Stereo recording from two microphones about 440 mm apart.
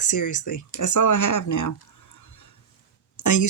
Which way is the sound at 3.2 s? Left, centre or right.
Left.